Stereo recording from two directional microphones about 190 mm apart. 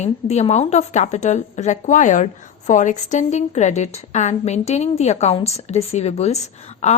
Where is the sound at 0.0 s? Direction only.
35° left (ahead or behind).